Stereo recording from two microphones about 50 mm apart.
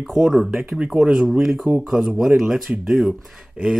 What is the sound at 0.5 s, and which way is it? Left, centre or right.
Speech, right.